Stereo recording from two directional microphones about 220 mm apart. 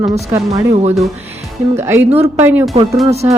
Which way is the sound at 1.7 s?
10° right (ahead or behind).